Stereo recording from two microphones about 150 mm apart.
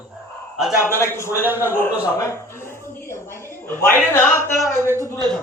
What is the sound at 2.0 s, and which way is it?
A woman's voice, 20° left (ahead or behind).